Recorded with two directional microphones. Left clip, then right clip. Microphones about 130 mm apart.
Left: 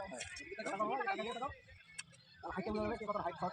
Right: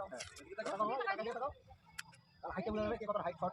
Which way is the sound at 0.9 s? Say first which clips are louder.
Even; 45° right (ahead or behind).